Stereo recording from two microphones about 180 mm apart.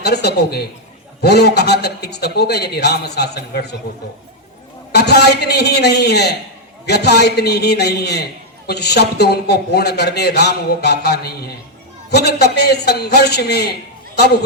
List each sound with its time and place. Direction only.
0.0 s a man's voice: 65° left (ahead or behind)
4.9 s a man's voice: 65° left (ahead or behind)